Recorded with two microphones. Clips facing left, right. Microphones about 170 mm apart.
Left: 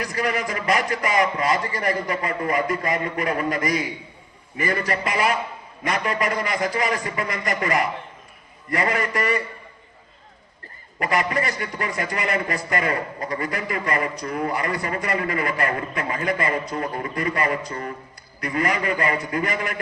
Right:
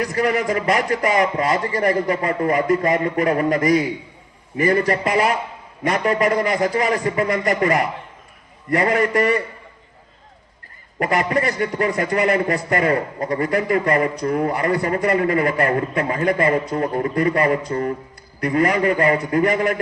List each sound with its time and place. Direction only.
0.1 s a man's voice: 35° right (ahead or behind)
9.0 s a man's voice: 30° right (ahead or behind)
11.0 s a man's voice: 30° right (ahead or behind)